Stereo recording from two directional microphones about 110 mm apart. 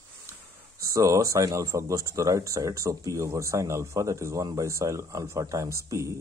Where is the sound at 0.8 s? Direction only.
30° right (ahead or behind).